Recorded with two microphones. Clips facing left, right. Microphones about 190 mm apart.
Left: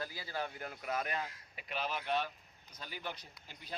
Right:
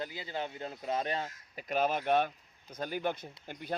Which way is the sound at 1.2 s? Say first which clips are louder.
Right 7 dB; 40° right (ahead or behind).